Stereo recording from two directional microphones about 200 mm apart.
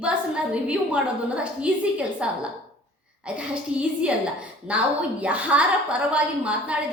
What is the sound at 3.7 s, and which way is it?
A woman's voice, 5° right (ahead or behind).